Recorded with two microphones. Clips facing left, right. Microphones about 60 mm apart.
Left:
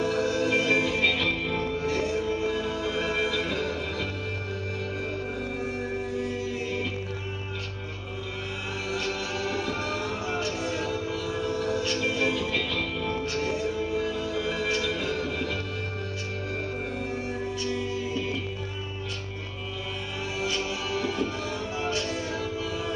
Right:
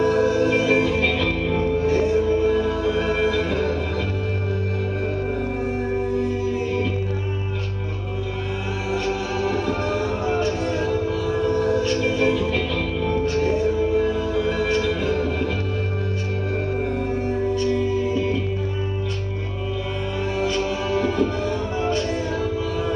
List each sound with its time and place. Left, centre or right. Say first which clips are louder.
0.0 s music: right 7 dB; centre
5.9 s music: right 7 dB; centre
8.9 s music: right 7 dB; centre
17.1 s music: right 9 dB; centre
20.3 s music: right 6 dB; centre